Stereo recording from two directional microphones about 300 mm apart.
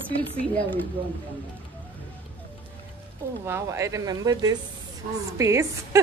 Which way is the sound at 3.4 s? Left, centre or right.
Centre.